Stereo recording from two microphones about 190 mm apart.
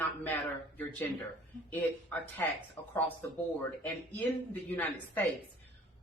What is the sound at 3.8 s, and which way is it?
Speech, 10° left (ahead or behind).